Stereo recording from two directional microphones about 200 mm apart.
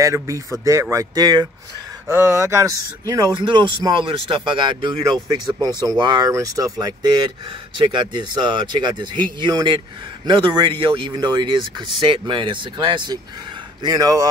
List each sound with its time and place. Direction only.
0.0 s speech: 15° right (ahead or behind)